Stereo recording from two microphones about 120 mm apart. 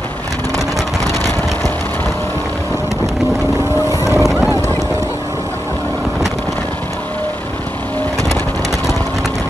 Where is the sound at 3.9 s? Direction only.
25° right (ahead or behind).